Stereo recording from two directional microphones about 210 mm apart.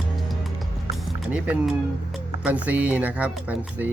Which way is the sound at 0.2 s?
Centre (ahead or behind).